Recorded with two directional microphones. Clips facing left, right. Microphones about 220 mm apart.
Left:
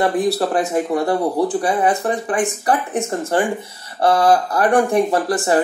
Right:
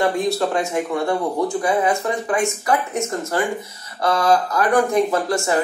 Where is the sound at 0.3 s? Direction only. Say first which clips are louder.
Left 2 dB; 35° left (ahead or behind).